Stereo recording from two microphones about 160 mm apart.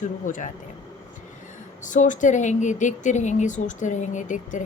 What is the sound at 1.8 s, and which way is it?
Speech, 50° left (ahead or behind).